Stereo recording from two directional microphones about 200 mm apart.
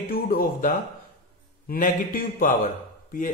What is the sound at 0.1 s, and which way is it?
Speech, 45° left (ahead or behind).